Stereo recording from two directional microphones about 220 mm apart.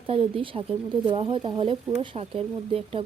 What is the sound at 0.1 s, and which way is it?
Speech, 25° right (ahead or behind).